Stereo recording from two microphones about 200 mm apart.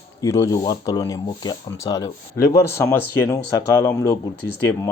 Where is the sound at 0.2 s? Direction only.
15° left (ahead or behind).